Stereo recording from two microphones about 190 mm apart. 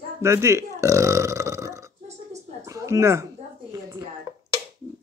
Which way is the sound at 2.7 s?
15° right (ahead or behind).